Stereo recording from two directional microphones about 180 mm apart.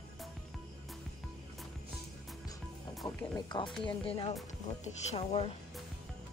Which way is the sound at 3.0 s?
25° left (ahead or behind).